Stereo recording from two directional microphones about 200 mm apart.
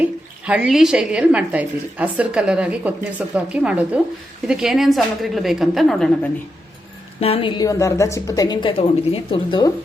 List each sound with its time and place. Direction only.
0.0 s a woman's voice: 5° right (ahead or behind)
7.2 s a woman's voice: 30° left (ahead or behind)